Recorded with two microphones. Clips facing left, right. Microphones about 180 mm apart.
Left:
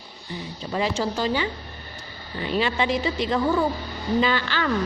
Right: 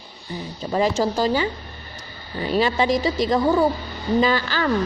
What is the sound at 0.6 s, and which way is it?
Speech, 45° right (ahead or behind).